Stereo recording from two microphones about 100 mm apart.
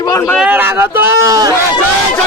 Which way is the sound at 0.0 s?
40° left (ahead or behind).